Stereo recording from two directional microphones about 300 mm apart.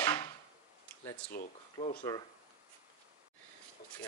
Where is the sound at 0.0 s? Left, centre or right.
Centre.